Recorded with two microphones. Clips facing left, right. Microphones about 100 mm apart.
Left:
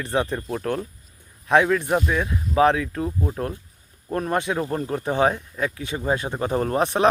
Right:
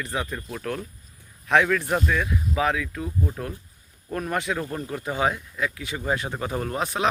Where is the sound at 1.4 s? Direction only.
20° left (ahead or behind).